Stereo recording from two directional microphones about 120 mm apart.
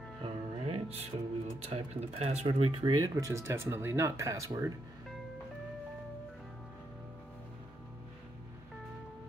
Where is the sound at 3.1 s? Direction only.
25° right (ahead or behind).